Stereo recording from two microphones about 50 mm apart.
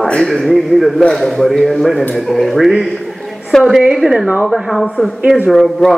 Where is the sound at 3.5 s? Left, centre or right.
Centre.